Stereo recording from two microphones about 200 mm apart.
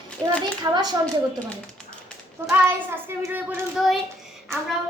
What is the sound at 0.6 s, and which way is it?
Speech, 20° right (ahead or behind).